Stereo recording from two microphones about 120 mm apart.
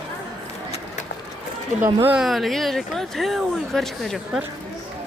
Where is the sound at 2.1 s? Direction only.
Centre (ahead or behind).